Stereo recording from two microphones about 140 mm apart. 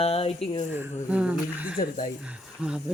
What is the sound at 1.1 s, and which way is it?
Speech, 10° right (ahead or behind).